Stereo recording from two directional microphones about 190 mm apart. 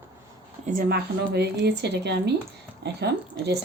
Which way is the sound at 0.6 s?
50° right (ahead or behind).